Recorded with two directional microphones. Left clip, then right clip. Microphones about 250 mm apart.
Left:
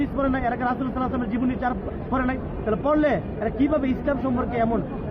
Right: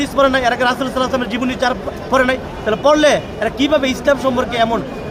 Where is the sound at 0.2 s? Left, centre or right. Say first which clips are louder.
Right 13 dB; right.